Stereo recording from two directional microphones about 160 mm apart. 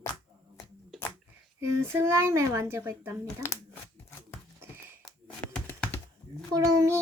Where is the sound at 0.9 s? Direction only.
Centre (ahead or behind).